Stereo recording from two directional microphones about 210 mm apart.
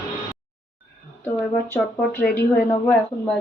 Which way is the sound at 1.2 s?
10° left (ahead or behind).